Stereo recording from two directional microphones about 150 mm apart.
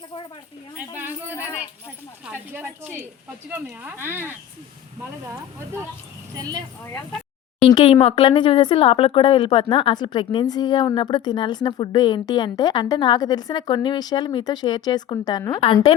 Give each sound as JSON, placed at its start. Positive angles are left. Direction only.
{"t": 0.8, "sound": "a sound", "side_deg": -10}
{"t": 2.2, "sound": "speech", "side_deg": -15}
{"t": 7.6, "sound": "a woman's voice", "side_deg": 35}